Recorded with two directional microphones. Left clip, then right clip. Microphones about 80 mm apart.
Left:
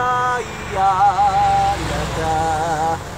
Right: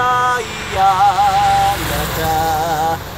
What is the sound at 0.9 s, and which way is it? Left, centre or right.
Vehicle, right.